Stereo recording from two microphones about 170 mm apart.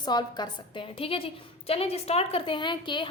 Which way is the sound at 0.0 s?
25° left (ahead or behind).